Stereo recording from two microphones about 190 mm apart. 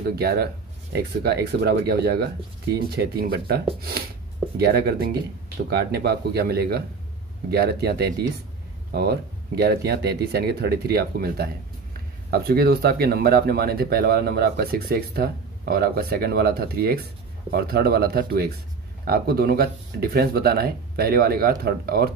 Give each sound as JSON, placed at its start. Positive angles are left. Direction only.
{"t": 0.1, "sound": "speech", "side_deg": -55}